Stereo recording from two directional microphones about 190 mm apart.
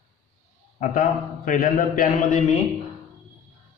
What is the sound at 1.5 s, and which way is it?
Speech, 45° left (ahead or behind).